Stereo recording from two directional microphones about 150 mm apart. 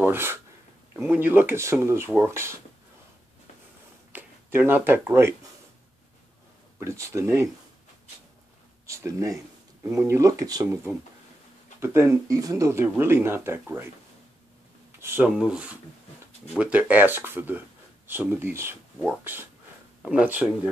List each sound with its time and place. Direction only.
0.0 s speech: 15° right (ahead or behind)
4.1 s speech: 15° right (ahead or behind)
6.8 s speech: 20° right (ahead or behind)
8.8 s speech: 20° right (ahead or behind)
11.8 s speech: 15° right (ahead or behind)
15.0 s a sound: 15° right (ahead or behind)
15.2 s speech: 5° right (ahead or behind)
20.0 s speech: 10° right (ahead or behind)